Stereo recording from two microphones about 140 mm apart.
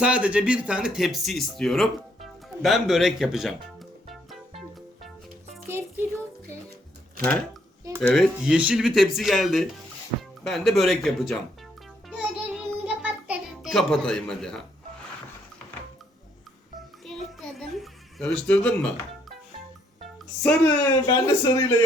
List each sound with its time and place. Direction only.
0.0 s speech: 10° right (ahead or behind)
5.6 s music: 15° right (ahead or behind)
8.0 s speech: 5° left (ahead or behind)
8.5 s speech: 10° right (ahead or behind)
12.0 s music: 10° right (ahead or behind)
13.7 s speech: 5° left (ahead or behind)
17.1 s a sound: centre (ahead or behind)
20.4 s speech: 5° left (ahead or behind)
21.1 s speech: 30° left (ahead or behind)